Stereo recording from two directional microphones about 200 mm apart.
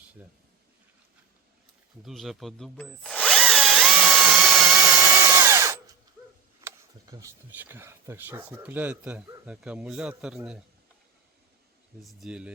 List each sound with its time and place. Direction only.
2.0 s drill: centre (ahead or behind)
6.7 s speech: 15° right (ahead or behind)
12.0 s speech: 5° right (ahead or behind)